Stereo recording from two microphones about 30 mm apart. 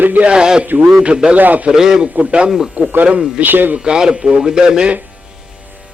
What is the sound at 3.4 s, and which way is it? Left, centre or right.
Speech, right.